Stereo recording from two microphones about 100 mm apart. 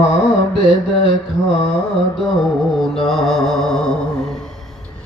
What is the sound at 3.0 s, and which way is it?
Mantra, centre (ahead or behind).